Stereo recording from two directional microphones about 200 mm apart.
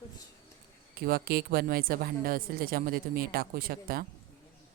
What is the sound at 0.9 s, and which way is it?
Speech, 50° right (ahead or behind).